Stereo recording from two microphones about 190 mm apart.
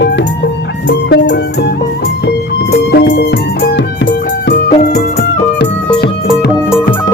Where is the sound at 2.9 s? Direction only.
65° left (ahead or behind).